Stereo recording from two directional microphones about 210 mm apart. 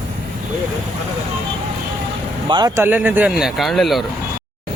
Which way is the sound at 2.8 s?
10° right (ahead or behind).